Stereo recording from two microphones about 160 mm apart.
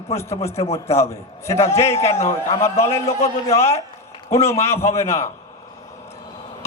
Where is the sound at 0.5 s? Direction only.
40° left (ahead or behind).